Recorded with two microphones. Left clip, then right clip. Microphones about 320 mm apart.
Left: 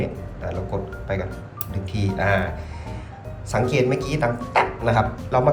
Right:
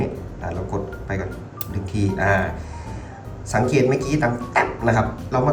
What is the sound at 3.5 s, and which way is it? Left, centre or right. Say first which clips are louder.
Speech: right 2 dB; centre.